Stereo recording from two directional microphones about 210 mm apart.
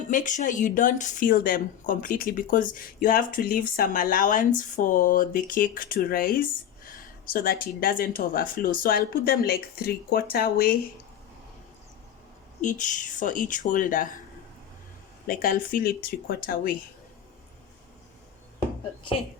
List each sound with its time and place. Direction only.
0.1 s speech: 35° left (ahead or behind)
12.6 s speech: 35° left (ahead or behind)
15.3 s speech: 40° left (ahead or behind)